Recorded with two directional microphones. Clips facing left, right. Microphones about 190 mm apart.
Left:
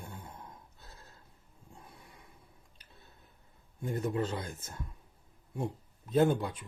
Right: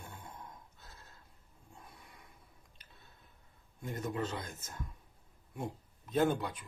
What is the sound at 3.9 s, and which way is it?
Speech, 30° left (ahead or behind).